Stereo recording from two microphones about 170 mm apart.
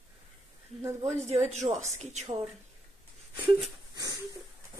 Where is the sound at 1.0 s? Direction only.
40° right (ahead or behind).